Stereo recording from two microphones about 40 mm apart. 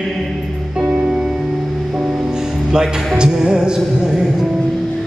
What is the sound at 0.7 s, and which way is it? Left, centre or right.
Music, right.